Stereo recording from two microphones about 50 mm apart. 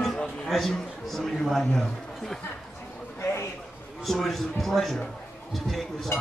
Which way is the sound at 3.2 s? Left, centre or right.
Left.